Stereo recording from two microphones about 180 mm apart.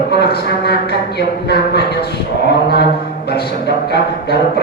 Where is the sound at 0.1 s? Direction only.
65° left (ahead or behind).